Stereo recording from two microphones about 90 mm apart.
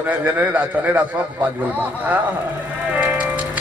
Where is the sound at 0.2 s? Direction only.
15° right (ahead or behind).